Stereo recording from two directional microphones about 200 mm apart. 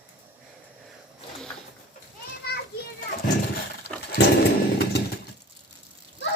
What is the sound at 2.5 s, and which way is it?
Children playing, 55° left (ahead or behind).